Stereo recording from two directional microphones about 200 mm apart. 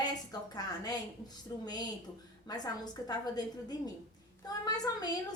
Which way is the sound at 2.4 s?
20° left (ahead or behind).